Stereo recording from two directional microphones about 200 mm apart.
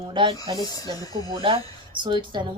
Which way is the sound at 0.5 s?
20° left (ahead or behind).